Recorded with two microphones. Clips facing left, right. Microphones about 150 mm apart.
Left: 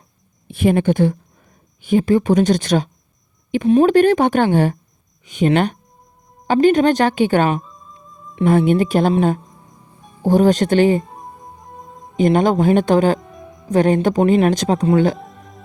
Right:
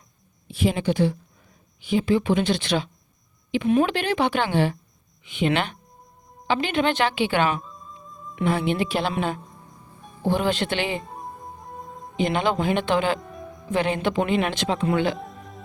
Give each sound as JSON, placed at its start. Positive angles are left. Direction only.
{"t": 0.4, "sound": "speech", "side_deg": 55}
{"t": 7.6, "sound": "music", "side_deg": 0}
{"t": 8.4, "sound": "speech", "side_deg": 45}
{"t": 11.0, "sound": "music", "side_deg": 0}
{"t": 12.1, "sound": "speech", "side_deg": 45}
{"t": 13.1, "sound": "music", "side_deg": 0}
{"t": 13.7, "sound": "speech", "side_deg": 45}
{"t": 15.2, "sound": "music", "side_deg": 0}